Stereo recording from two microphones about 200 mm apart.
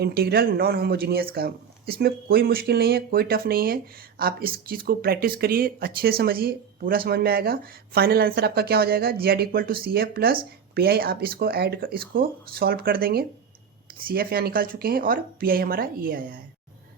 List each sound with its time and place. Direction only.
0.0 s speech: 50° right (ahead or behind)